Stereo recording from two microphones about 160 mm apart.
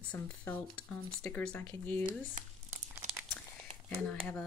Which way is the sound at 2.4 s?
55° right (ahead or behind).